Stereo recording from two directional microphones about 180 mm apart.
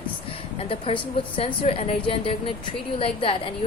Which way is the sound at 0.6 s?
35° left (ahead or behind).